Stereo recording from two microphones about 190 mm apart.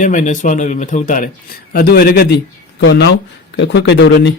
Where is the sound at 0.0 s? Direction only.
40° left (ahead or behind).